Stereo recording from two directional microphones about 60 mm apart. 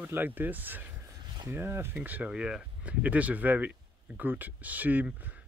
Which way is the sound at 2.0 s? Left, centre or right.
Right.